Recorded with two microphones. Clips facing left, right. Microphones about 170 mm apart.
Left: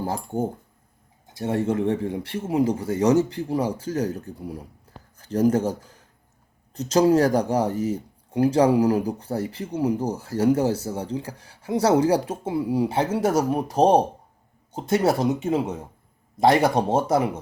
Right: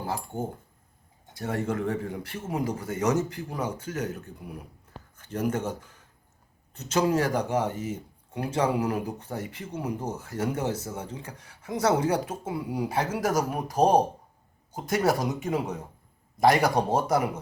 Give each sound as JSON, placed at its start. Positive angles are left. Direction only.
{"t": 0.0, "sound": "speech", "side_deg": 40}
{"t": 1.3, "sound": "speech", "side_deg": 25}